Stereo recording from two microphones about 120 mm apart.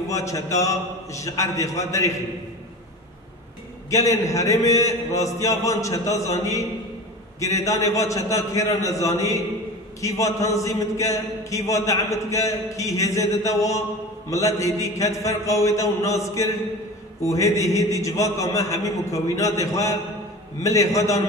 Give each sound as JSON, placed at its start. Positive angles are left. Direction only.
{"t": 0.1, "sound": "a man's voice", "side_deg": 25}
{"t": 3.9, "sound": "a man's voice", "side_deg": 25}
{"t": 17.3, "sound": "a man's voice", "side_deg": 25}